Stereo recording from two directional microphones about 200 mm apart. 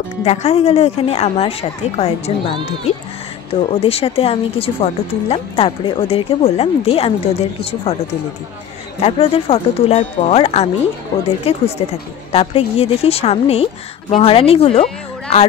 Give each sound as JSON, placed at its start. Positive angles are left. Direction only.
{"t": 0.2, "sound": "a woman's voice", "side_deg": 35}
{"t": 9.0, "sound": "a woman's voice", "side_deg": 30}